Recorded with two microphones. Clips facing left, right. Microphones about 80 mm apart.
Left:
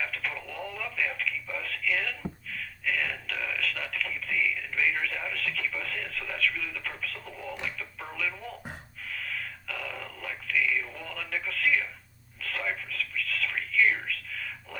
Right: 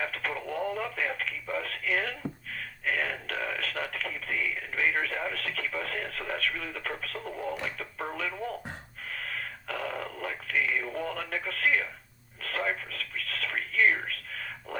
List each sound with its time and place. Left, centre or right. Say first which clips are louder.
0.0 s telephone: right 2 dB; right
7.6 s radio: right 2 dB; right
9.0 s radio: even; right
12.4 s a sound: right 2 dB; right